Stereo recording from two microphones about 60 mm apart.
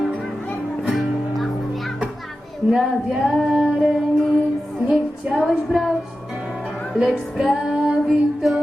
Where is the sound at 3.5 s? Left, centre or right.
Centre.